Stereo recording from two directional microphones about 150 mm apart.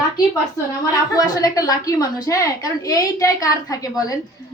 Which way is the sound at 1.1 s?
25° left (ahead or behind).